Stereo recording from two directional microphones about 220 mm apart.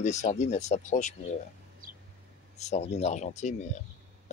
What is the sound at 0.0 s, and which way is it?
Speech, 30° left (ahead or behind).